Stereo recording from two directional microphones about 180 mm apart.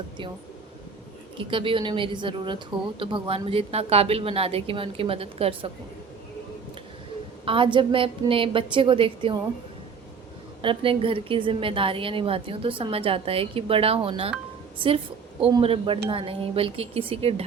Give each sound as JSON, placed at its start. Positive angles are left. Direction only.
{"t": 1.5, "sound": "a woman's voice", "side_deg": -30}
{"t": 7.4, "sound": "a woman's voice", "side_deg": -30}
{"t": 10.6, "sound": "a woman's voice", "side_deg": -30}